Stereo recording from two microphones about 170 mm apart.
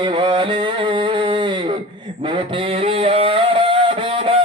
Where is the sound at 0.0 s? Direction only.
30° right (ahead or behind).